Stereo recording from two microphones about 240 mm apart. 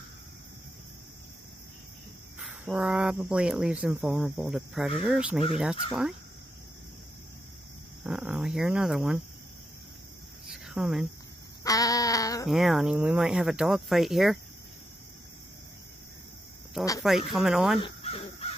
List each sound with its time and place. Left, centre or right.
2.4 s speech: centre
8.0 s speech: centre
10.4 s cricket: centre
11.6 s a sound: centre
12.4 s speech: centre
16.8 s speech: centre
17.7 s crow: left